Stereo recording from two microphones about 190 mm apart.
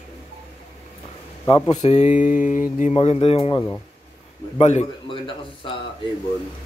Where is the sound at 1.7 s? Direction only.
35° left (ahead or behind).